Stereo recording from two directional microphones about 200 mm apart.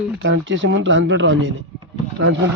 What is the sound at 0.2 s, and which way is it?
Speech, 70° right (ahead or behind).